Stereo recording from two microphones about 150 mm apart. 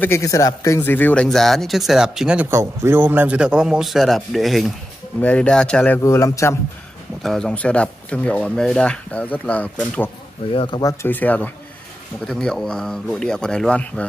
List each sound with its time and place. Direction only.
0.0 s speech: 20° left (ahead or behind)
0.7 s a man's voice: 15° left (ahead or behind); by 2.4 s 5° right (ahead or behind)
2.5 s a man's voice: 20° right (ahead or behind); by 6.5 s 20° left (ahead or behind)
7.2 s speech: 5° left (ahead or behind)
10.5 s speech: 40° left (ahead or behind)
10.8 s speech: 25° left (ahead or behind)
11.1 s a man's voice: 10° left (ahead or behind)